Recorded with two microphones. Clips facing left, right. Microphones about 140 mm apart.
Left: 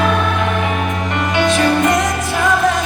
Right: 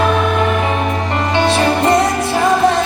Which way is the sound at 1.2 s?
30° right (ahead or behind).